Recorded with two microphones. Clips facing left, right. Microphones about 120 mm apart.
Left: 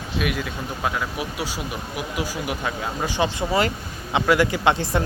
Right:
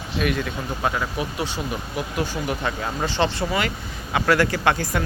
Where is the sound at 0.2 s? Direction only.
5° left (ahead or behind).